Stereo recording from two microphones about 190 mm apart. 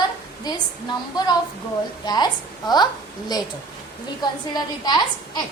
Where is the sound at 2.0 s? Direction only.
20° left (ahead or behind).